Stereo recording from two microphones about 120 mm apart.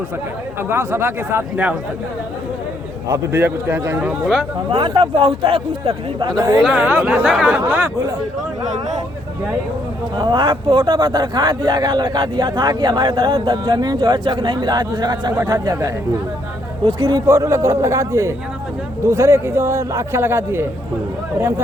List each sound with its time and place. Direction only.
0.7 s a man's voice: 20° right (ahead or behind)
3.1 s a man's voice: 20° right (ahead or behind)
4.7 s a man's voice: 50° right (ahead or behind)
6.2 s a man's voice: 25° right (ahead or behind)
6.6 s a man's voice: 10° right (ahead or behind)
7.2 s speech: 5° left (ahead or behind)
7.5 s a man's voice: 15° right (ahead or behind)
10.2 s a man's voice: 40° right (ahead or behind)
15.4 s a man's voice: 20° right (ahead or behind)